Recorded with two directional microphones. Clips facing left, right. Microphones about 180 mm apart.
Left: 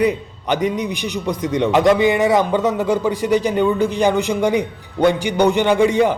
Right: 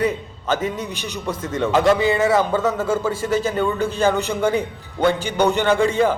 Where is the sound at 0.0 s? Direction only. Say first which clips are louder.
Left 4 dB; 15° left (ahead or behind).